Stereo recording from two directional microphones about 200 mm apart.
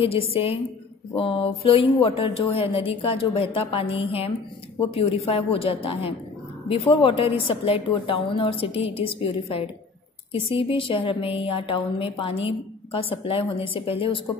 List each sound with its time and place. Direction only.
0.0 s a woman's voice: 30° left (ahead or behind)